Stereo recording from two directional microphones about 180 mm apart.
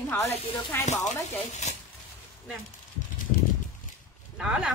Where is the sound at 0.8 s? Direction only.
40° left (ahead or behind).